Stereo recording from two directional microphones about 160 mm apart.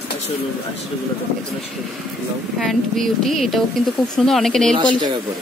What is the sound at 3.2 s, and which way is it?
Speech, centre (ahead or behind).